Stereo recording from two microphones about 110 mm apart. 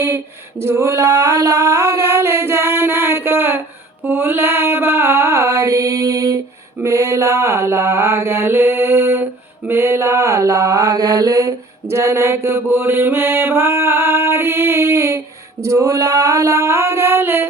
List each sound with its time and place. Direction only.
0.6 s mantra: 25° right (ahead or behind)